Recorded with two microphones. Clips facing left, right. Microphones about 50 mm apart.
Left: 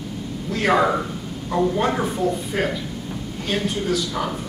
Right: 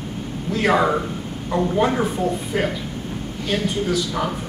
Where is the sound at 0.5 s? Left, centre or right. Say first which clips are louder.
Right 1 dB; centre.